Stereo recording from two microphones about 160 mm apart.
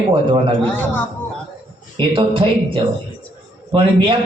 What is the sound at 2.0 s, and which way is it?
A man's voice, 30° right (ahead or behind).